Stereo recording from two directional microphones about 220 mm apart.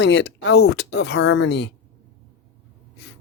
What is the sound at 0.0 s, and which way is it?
Speech, 50° left (ahead or behind).